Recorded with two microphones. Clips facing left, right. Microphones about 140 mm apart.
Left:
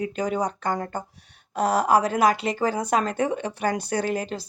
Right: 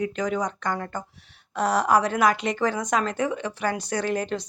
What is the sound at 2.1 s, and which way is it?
A woman's voice, 35° left (ahead or behind).